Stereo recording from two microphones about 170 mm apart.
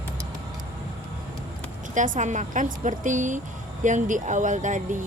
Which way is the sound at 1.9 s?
50° right (ahead or behind).